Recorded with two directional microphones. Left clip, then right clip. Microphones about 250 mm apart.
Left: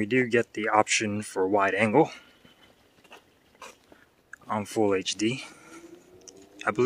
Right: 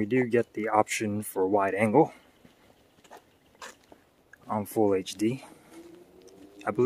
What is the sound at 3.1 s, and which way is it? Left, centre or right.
Dog, centre.